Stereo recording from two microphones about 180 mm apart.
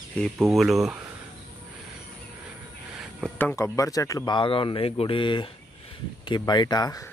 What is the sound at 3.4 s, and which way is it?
Speech, 10° left (ahead or behind).